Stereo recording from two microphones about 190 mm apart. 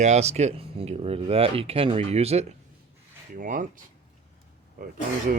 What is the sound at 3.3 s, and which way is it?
Speech, 45° right (ahead or behind).